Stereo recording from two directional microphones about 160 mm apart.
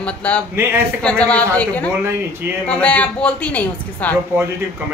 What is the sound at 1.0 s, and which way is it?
A woman's voice, 5° left (ahead or behind).